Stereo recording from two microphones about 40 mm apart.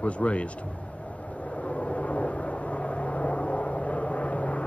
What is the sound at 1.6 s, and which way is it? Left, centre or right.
Vehicle, left.